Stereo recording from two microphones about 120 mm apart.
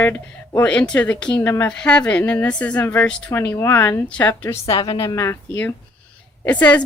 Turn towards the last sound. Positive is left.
turn(degrees=10)  # may be behind; listen again after turning